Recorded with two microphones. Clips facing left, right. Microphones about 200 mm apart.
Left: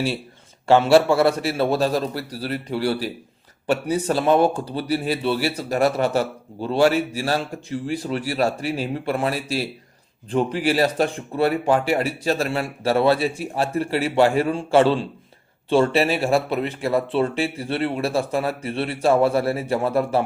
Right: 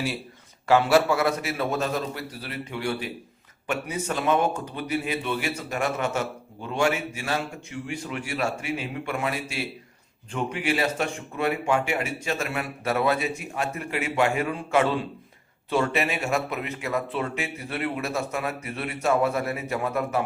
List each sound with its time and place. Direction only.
0.7 s speech: 30° left (ahead or behind)